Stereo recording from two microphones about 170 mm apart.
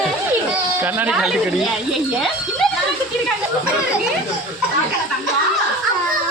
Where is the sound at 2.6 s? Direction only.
Centre (ahead or behind).